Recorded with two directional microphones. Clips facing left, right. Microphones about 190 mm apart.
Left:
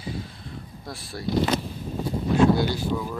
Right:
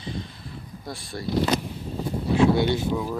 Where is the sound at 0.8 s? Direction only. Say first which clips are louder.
Right 3 dB; centre (ahead or behind).